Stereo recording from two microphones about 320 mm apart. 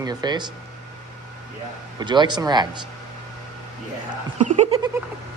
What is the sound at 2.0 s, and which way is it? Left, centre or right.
Speech, centre.